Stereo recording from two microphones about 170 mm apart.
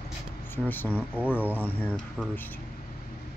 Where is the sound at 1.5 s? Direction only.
10° left (ahead or behind).